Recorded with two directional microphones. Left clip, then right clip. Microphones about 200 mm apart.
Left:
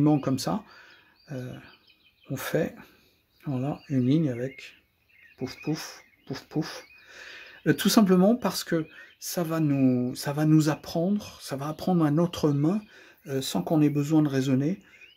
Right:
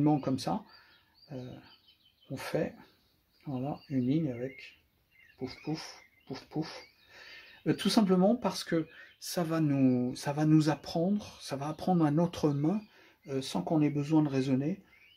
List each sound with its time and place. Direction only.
0.0 s speech: 20° left (ahead or behind)
1.2 s bird: 25° left (ahead or behind)
2.2 s speech: 25° left (ahead or behind)
5.7 s speech: 30° left (ahead or behind)